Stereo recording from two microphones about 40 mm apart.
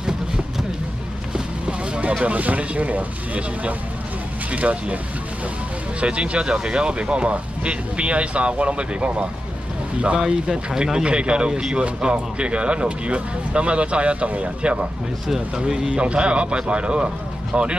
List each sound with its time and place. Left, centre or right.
1.3 s speech: right
5.9 s speech: right
15.2 s speech: centre
16.0 s speech: right